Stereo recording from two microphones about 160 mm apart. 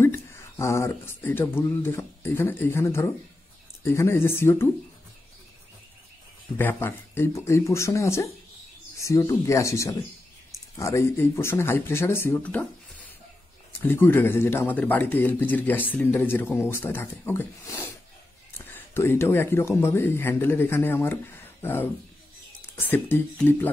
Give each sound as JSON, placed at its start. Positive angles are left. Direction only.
{"t": 0.0, "sound": "speech", "side_deg": 15}
{"t": 6.6, "sound": "speech", "side_deg": 15}